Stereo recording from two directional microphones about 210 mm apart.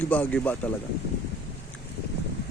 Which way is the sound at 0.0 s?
10° left (ahead or behind).